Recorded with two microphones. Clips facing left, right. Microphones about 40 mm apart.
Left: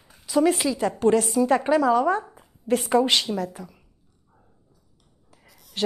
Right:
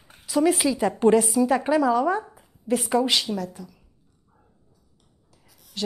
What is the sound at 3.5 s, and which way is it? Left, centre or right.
Speech, left.